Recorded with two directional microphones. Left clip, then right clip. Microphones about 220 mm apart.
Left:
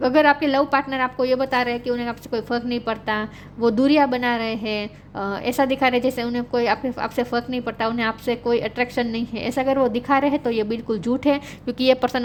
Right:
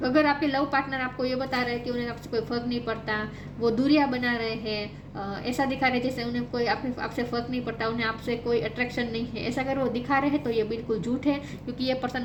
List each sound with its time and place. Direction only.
0.0 s a woman's voice: 50° left (ahead or behind)